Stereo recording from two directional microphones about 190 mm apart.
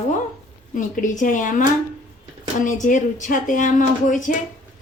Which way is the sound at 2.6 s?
40° left (ahead or behind).